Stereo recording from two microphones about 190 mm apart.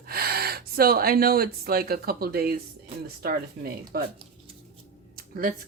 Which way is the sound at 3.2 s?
50° right (ahead or behind).